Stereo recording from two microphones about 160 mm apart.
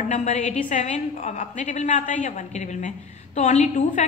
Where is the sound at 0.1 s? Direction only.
45° left (ahead or behind).